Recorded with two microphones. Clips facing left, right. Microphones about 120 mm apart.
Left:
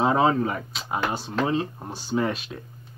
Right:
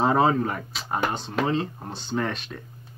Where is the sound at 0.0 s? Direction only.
Centre (ahead or behind).